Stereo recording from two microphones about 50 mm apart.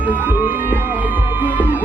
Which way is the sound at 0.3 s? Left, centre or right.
Right.